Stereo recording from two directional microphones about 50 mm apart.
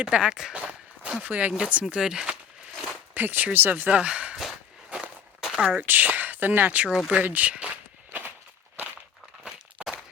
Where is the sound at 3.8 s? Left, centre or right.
Right.